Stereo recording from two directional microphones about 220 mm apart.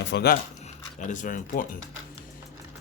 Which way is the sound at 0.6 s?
35° left (ahead or behind).